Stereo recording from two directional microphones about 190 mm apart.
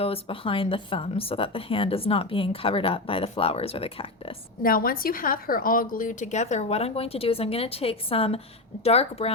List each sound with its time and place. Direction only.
0.0 s speech: 30° left (ahead or behind)
4.6 s a woman's voice: 50° left (ahead or behind); by 9.3 s 30° left (ahead or behind)